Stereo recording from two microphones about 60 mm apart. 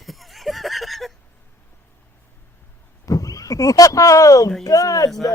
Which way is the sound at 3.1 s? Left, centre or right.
Left.